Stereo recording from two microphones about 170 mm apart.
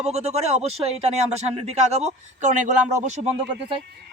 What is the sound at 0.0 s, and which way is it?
Speech, 40° right (ahead or behind).